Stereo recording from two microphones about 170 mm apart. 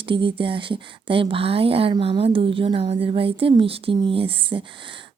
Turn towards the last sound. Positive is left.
turn(degrees=-30)  # may be behind; listen again after turning